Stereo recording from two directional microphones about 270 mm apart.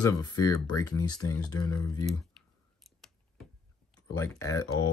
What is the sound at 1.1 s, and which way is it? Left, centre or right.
Speech, centre.